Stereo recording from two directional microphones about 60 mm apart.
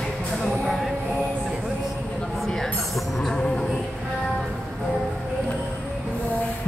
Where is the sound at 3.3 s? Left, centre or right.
Centre.